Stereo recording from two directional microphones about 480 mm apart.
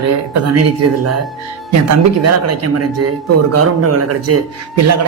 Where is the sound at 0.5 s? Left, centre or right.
Right.